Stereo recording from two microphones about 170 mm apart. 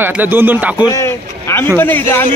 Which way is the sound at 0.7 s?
20° left (ahead or behind).